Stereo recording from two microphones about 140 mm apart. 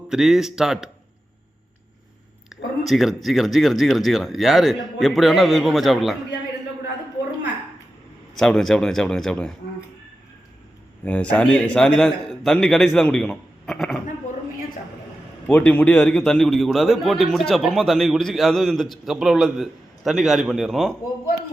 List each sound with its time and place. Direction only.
0.1 s speech: 5° right (ahead or behind)
2.5 s speech: centre (ahead or behind)
8.4 s speech: centre (ahead or behind)
11.0 s speech: 10° left (ahead or behind)
15.4 s speech: 10° left (ahead or behind)